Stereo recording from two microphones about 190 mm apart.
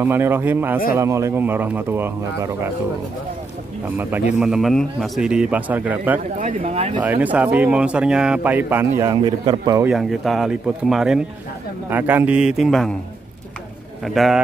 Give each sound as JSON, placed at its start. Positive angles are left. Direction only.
{"t": 0.0, "sound": "speech", "side_deg": -10}
{"t": 4.3, "sound": "a man's voice", "side_deg": -5}
{"t": 6.4, "sound": "speech", "side_deg": -35}
{"t": 7.0, "sound": "speech", "side_deg": -10}
{"t": 9.8, "sound": "a man's voice", "side_deg": 0}
{"t": 14.0, "sound": "a man's voice", "side_deg": 0}